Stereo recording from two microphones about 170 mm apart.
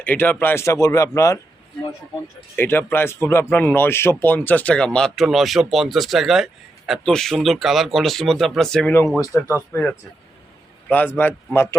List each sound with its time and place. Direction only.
0.0 s speech: 10° left (ahead or behind)
2.6 s speech: 10° left (ahead or behind)